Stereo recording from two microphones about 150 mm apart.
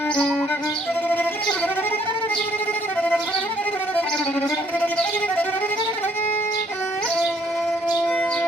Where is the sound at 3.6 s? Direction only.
10° left (ahead or behind).